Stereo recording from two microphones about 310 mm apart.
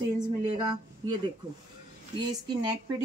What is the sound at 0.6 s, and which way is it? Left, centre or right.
Speech, right.